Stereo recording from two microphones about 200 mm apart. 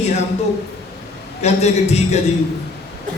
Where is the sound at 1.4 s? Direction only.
35° left (ahead or behind).